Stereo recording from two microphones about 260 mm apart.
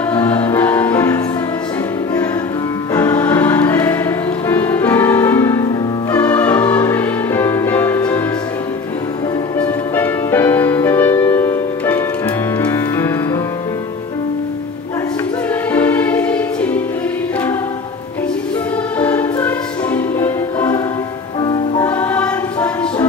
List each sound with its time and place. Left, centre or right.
0.1 s music: centre
2.9 s choir: centre
6.1 s music: centre
9.6 s music: centre
15.7 s music: centre
18.9 s music: centre
21.8 s music: centre